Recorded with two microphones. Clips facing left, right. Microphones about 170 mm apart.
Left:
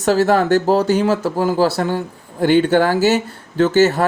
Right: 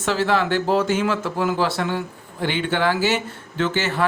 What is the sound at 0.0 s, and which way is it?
Speech, 40° left (ahead or behind).